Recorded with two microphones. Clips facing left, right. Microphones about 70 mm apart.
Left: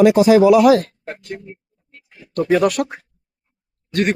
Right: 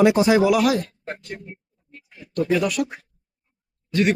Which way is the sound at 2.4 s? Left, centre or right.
Left.